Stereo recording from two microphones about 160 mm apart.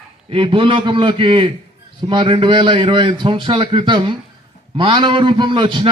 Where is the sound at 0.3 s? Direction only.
35° right (ahead or behind).